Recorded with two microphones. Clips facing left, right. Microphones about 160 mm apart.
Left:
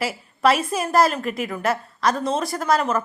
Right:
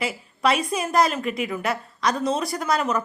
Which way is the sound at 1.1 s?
40° left (ahead or behind).